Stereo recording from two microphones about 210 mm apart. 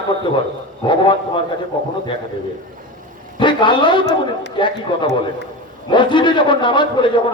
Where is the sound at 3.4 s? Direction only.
25° left (ahead or behind).